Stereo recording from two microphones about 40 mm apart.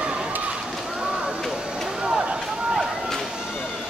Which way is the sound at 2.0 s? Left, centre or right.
Centre.